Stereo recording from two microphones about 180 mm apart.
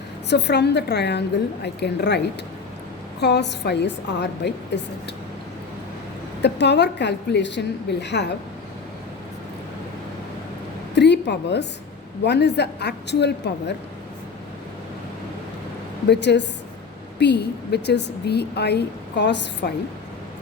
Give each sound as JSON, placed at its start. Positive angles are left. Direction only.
{"t": 0.3, "sound": "a woman's voice", "side_deg": 70}
{"t": 6.4, "sound": "a woman's voice", "side_deg": 70}
{"t": 10.9, "sound": "a woman's voice", "side_deg": 75}
{"t": 16.0, "sound": "a woman's voice", "side_deg": 70}